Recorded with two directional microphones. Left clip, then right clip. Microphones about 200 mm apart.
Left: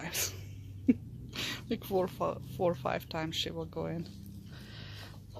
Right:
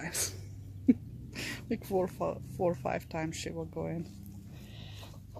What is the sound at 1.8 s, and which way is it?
Speech, centre (ahead or behind).